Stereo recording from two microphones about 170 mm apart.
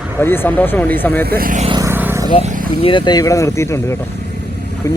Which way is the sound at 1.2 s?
60° right (ahead or behind).